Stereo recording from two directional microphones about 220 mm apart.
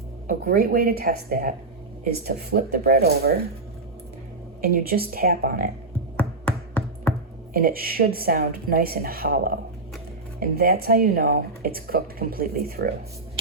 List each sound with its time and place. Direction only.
0.3 s speech: 40° right (ahead or behind)
4.6 s speech: 40° right (ahead or behind)
6.1 s finger snapping: 5° left (ahead or behind)
7.5 s speech: 40° right (ahead or behind)